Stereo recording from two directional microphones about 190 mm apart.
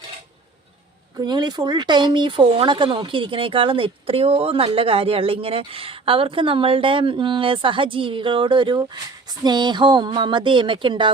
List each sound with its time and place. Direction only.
1.2 s speech: 20° right (ahead or behind)